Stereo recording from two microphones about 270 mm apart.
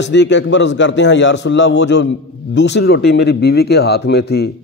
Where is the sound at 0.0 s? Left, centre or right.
Left.